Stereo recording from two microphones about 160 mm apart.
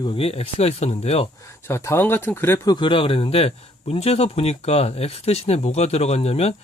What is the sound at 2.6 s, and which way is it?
Speech, 30° left (ahead or behind).